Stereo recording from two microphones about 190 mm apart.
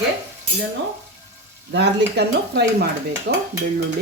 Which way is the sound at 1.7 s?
60° right (ahead or behind).